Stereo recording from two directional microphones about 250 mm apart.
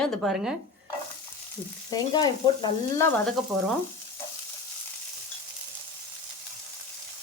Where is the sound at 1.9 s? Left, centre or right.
Centre.